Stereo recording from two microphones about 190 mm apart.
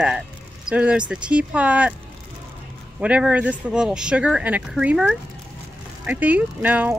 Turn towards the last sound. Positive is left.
turn(degrees=-10)  # may be behind; listen again after turning